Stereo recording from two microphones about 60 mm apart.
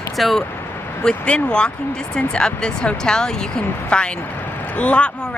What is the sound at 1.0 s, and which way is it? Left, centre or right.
Speech, centre.